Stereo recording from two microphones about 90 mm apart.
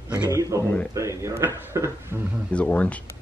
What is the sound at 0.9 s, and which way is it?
Speech, 35° right (ahead or behind).